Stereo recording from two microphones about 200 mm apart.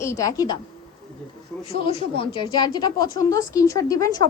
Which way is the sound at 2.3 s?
20° left (ahead or behind).